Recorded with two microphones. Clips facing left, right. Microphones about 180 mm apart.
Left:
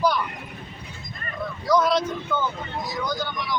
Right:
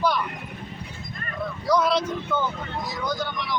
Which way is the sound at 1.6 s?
Centre (ahead or behind).